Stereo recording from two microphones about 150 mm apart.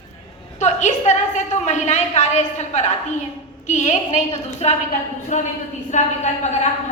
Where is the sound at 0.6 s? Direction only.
50° left (ahead or behind).